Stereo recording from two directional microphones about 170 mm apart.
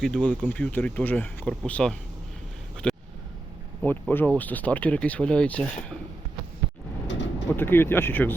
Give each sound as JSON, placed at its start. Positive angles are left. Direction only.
{"t": 0.0, "sound": "speech", "side_deg": 5}
{"t": 2.8, "sound": "a sound", "side_deg": 5}
{"t": 3.8, "sound": "speech", "side_deg": 15}
{"t": 7.1, "sound": "vehicle", "side_deg": 90}
{"t": 7.4, "sound": "speech", "side_deg": 10}